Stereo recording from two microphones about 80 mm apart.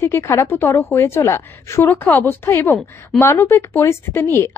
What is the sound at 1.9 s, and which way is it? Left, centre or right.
A woman's voice, left.